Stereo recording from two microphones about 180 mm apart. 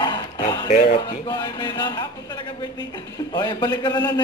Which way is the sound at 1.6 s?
25° left (ahead or behind).